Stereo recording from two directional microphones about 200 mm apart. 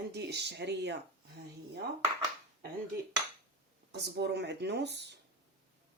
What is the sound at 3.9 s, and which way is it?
A woman's voice, 55° right (ahead or behind).